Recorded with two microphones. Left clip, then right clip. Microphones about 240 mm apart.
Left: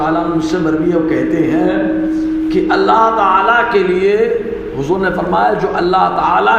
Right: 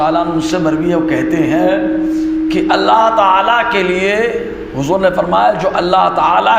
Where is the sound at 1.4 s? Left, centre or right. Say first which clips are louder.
Right 1 dB; right.